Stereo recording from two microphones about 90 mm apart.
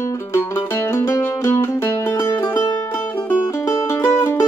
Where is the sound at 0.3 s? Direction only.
30° left (ahead or behind).